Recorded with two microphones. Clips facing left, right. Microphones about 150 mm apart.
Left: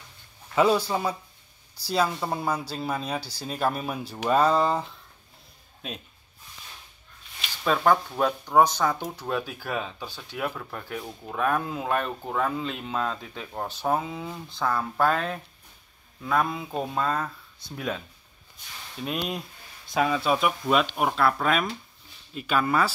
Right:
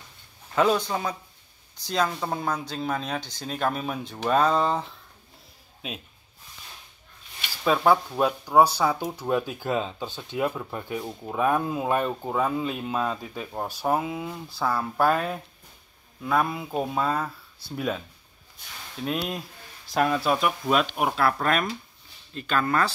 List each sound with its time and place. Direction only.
0.6 s speech: 5° left (ahead or behind)
7.6 s speech: 10° right (ahead or behind); by 22.8 s 5° left (ahead or behind)